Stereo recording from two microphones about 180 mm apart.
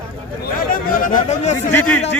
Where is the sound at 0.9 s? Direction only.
50° left (ahead or behind).